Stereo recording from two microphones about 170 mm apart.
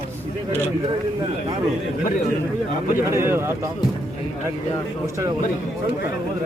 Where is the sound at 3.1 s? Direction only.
15° right (ahead or behind).